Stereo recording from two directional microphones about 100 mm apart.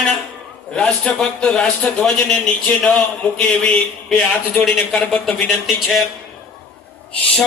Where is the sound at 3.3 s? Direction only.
15° left (ahead or behind).